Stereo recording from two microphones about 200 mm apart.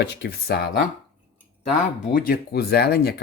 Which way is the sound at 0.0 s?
55° left (ahead or behind).